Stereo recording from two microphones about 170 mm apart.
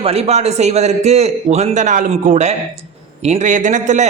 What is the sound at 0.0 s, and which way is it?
A man's voice, 35° right (ahead or behind).